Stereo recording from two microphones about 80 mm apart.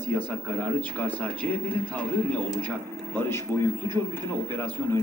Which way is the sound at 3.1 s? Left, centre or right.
Left.